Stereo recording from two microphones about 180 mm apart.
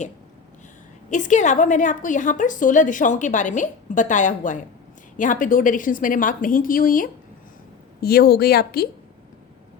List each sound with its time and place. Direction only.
1.1 s a woman's voice: 45° left (ahead or behind)
8.0 s speech: 60° left (ahead or behind)